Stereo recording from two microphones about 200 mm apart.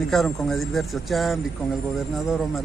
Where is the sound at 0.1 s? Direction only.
Centre (ahead or behind).